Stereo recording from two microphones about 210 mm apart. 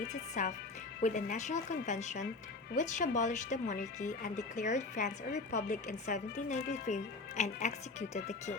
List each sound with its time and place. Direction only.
0.1 s speech: 35° left (ahead or behind)